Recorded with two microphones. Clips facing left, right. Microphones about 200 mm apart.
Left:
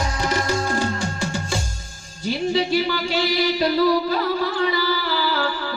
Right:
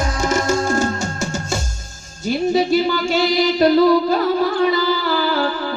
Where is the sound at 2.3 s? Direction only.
45° right (ahead or behind).